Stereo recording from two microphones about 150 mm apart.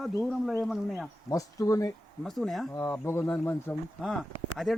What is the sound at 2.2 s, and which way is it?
Speech, centre (ahead or behind).